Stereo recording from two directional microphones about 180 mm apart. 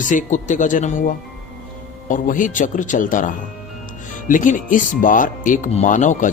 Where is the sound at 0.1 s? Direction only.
45° left (ahead or behind).